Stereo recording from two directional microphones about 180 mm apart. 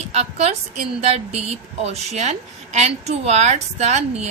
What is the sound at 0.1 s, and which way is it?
A woman's voice, 35° right (ahead or behind).